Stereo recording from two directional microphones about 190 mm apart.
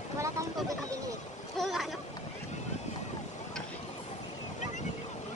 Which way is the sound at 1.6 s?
Centre (ahead or behind).